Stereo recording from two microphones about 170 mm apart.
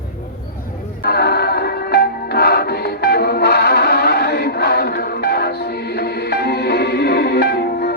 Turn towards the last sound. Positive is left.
turn(degrees=70)  # may be behind; listen again after turning